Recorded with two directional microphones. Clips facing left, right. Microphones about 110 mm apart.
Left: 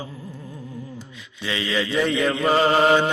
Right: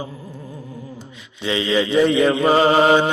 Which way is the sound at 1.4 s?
25° right (ahead or behind).